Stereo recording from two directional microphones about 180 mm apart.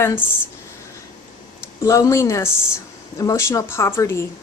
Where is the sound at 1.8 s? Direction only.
15° left (ahead or behind).